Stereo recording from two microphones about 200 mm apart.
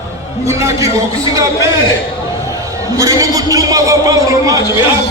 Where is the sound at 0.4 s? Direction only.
15° right (ahead or behind).